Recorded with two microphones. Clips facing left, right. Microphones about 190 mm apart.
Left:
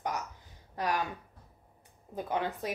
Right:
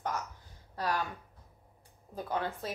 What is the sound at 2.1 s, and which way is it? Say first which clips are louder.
Speech: left 2 dB; 15° left (ahead or behind).